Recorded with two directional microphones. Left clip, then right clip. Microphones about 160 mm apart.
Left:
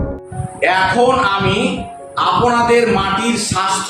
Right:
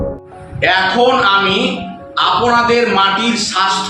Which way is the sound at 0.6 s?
5° left (ahead or behind).